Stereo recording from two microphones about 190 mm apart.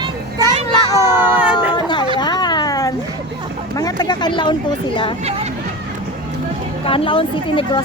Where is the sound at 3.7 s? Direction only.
20° left (ahead or behind).